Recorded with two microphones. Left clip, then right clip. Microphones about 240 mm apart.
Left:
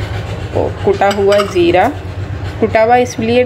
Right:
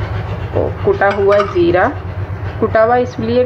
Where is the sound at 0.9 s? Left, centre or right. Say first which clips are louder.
Left 1 dB; left.